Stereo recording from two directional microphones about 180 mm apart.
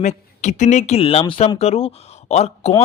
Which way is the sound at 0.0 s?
40° left (ahead or behind).